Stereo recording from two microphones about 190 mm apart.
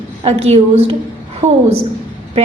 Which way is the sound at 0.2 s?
35° right (ahead or behind).